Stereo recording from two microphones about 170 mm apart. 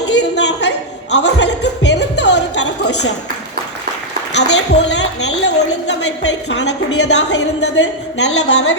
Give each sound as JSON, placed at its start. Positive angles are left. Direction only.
{"t": 0.1, "sound": "a sound", "side_deg": 90}
{"t": 1.1, "sound": "music", "side_deg": 90}
{"t": 4.4, "sound": "a woman's voice", "side_deg": 90}